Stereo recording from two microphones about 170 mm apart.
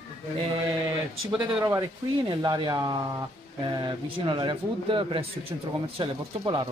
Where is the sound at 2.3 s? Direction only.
25° right (ahead or behind).